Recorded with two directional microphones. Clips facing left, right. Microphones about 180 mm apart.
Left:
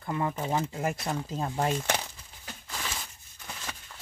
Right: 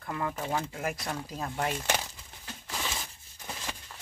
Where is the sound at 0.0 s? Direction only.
25° left (ahead or behind).